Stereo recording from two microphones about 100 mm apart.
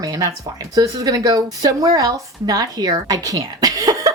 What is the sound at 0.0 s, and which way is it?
A woman's voice, 35° right (ahead or behind).